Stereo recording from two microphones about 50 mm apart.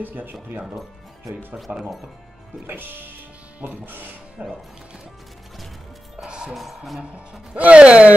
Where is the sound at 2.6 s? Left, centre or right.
Right.